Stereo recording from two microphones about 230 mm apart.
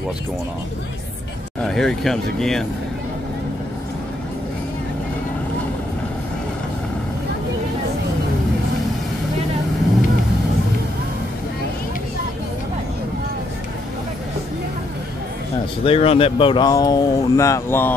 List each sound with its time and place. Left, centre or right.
1.6 s speech: centre
15.8 s speech: left; by 17.9 s centre